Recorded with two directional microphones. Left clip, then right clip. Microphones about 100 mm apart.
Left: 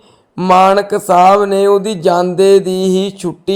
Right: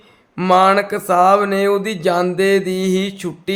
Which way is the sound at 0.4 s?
25° left (ahead or behind).